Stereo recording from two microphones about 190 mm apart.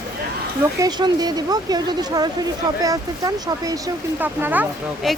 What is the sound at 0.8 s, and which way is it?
Speech, 20° right (ahead or behind).